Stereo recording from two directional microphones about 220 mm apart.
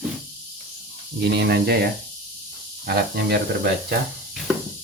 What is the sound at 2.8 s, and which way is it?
Speech, 45° right (ahead or behind).